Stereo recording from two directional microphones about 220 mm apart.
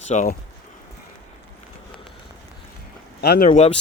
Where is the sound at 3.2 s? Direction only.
45° left (ahead or behind).